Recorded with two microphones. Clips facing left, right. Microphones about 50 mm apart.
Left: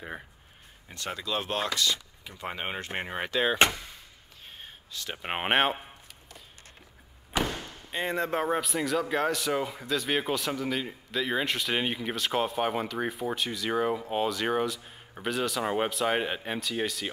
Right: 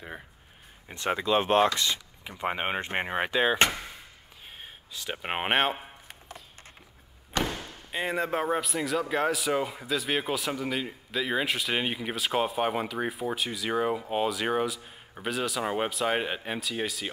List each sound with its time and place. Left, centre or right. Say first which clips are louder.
0.8 s speech: right 7 dB; right
4.6 s speech: left 1 dB; centre
7.4 s speech: even; centre